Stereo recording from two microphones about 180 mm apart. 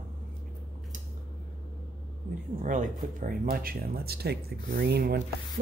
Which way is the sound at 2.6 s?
45° right (ahead or behind).